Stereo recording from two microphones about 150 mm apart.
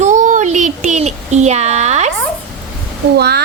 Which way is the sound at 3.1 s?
90° right.